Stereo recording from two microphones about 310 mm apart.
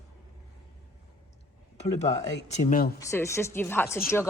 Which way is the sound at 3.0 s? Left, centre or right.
Centre.